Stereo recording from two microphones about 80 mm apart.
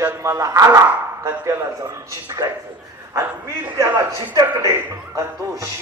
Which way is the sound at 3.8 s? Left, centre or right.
Right.